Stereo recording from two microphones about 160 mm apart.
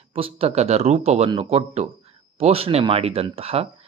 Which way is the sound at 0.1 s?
35° right (ahead or behind).